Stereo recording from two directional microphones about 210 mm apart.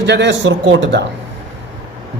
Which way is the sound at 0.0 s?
55° right (ahead or behind).